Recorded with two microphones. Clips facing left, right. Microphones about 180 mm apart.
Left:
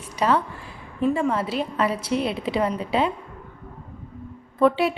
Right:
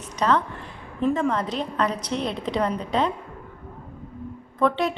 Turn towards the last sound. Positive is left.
turn(degrees=5)  # may be behind; listen again after turning